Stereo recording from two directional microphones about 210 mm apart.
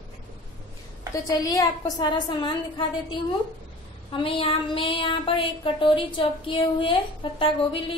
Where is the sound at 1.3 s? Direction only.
15° left (ahead or behind).